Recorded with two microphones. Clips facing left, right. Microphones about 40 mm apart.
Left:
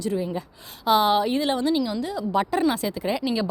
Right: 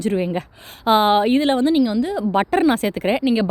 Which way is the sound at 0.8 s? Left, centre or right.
Right.